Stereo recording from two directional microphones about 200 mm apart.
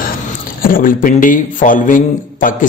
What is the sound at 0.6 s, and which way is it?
A man's voice, 45° left (ahead or behind).